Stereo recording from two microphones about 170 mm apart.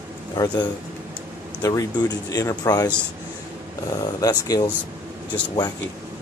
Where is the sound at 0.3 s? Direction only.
25° left (ahead or behind).